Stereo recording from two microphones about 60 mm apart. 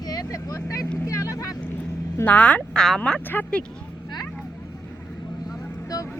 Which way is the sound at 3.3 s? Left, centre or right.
Left.